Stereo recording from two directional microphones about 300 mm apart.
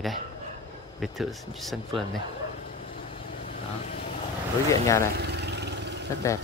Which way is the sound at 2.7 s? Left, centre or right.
Left.